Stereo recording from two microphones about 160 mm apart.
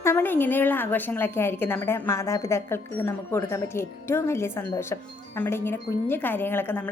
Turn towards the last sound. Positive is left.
turn(degrees=10)  # may be behind; listen again after turning